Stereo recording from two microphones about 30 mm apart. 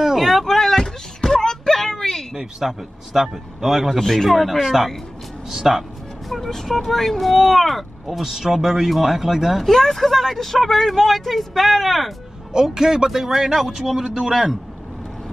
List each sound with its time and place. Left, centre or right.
0.2 s a sound: centre
2.3 s a man's voice: centre
4.0 s speech: centre
4.3 s speech: centre
5.5 s music: centre
6.3 s speech: centre
8.1 s a man's voice: centre
9.6 s speech: centre
12.5 s a man's voice: right
14.0 s a man's voice: right
14.3 s speech: centre